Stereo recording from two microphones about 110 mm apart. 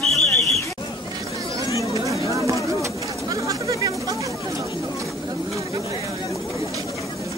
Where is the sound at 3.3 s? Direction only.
30° right (ahead or behind).